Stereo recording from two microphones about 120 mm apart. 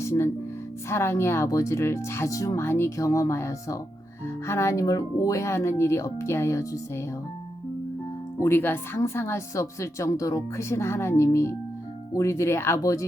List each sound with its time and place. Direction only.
0.0 s speech: 20° left (ahead or behind)
8.4 s speech: 20° left (ahead or behind)